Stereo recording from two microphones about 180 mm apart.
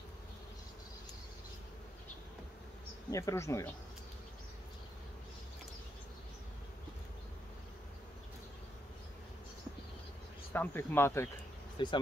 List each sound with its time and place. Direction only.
3.1 s speech: 15° left (ahead or behind)
10.5 s speech: 10° left (ahead or behind)
11.8 s speech: 25° left (ahead or behind)